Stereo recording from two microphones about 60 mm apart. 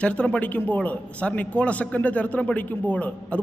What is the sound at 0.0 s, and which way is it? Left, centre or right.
A man's voice, centre.